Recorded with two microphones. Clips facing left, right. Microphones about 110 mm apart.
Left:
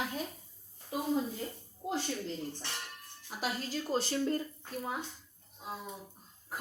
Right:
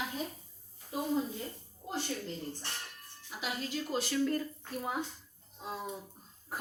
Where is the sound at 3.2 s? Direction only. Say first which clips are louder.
Left 2 dB; 40° left (ahead or behind).